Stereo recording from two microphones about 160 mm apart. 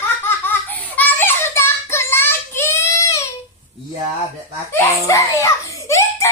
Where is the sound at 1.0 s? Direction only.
10° left (ahead or behind).